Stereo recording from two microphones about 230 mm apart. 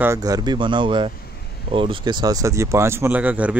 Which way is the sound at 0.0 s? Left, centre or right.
Centre.